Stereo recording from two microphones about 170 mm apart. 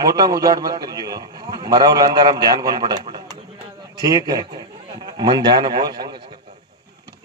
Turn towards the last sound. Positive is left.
turn(degrees=-25)  # may be behind; listen again after turning